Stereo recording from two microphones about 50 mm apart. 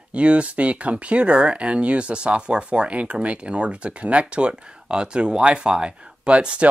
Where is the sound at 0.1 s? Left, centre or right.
Right.